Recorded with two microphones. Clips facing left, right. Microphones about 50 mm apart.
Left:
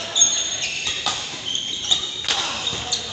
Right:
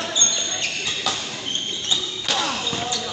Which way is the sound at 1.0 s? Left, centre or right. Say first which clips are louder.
Right 2 dB; centre.